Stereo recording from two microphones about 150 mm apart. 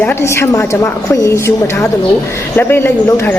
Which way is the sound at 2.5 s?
15° left (ahead or behind).